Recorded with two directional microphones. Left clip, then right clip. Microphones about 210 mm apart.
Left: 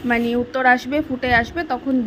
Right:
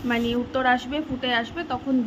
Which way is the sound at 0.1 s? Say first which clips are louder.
Left 5 dB; 20° left (ahead or behind).